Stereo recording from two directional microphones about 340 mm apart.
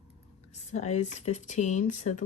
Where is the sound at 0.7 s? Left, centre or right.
Centre.